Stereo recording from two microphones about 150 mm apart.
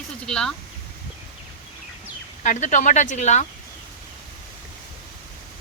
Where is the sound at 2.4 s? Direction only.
55° left (ahead or behind).